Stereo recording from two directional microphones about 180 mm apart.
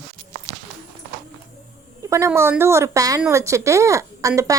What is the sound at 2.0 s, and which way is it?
A woman's voice, 15° right (ahead or behind).